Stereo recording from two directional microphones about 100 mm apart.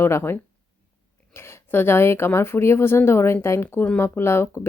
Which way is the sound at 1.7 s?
20° left (ahead or behind).